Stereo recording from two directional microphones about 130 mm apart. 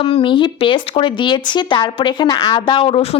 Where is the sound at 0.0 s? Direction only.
40° left (ahead or behind).